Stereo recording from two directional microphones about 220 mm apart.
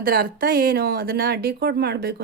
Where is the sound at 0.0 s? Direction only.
40° right (ahead or behind).